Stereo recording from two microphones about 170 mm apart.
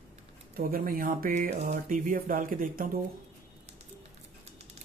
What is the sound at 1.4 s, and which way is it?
Speech, 40° right (ahead or behind).